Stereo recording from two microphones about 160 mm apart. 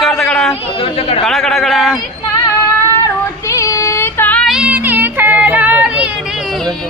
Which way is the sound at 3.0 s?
20° left (ahead or behind).